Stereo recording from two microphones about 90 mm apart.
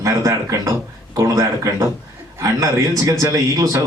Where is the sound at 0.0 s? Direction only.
40° right (ahead or behind).